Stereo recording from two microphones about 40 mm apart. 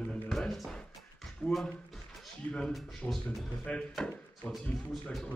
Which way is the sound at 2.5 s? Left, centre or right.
Left.